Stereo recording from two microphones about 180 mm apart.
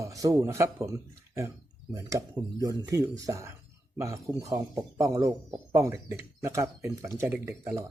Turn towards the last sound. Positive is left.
turn(degrees=-15)  # may be behind; listen again after turning